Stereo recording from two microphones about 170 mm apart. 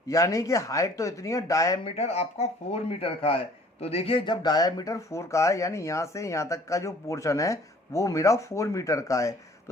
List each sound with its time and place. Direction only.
0.1 s speech: 20° left (ahead or behind)
1.8 s speech: 40° left (ahead or behind); by 9.3 s 20° left (ahead or behind)